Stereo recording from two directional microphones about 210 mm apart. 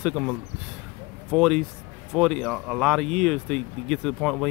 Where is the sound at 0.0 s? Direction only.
Centre (ahead or behind).